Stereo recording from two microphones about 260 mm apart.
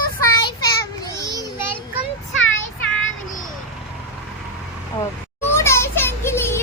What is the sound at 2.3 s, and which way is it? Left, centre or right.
Child singing, left.